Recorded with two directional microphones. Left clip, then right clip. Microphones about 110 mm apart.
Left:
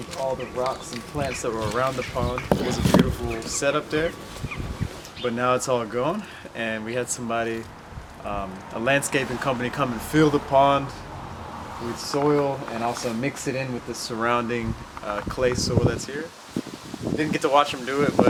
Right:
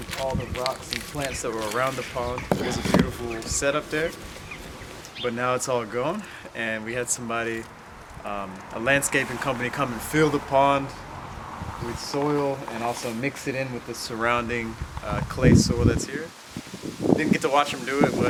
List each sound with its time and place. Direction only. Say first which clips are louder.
0.1 s speech: left 1 dB; 30° right (ahead or behind)
1.4 s speech: even; 15° right (ahead or behind)
5.2 s speech: left 2 dB; 5° right (ahead or behind)
12.1 s speech: left 3 dB; 5° right (ahead or behind)
17.3 s speech: left 2 dB; 5° right (ahead or behind)